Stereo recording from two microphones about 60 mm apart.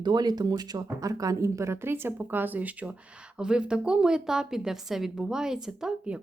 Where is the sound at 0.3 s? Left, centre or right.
Right.